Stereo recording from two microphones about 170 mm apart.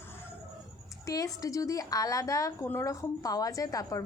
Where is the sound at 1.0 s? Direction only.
20° left (ahead or behind).